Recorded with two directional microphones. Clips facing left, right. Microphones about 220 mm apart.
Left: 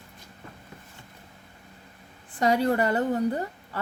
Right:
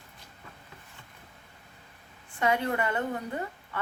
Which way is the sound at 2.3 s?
35° left (ahead or behind).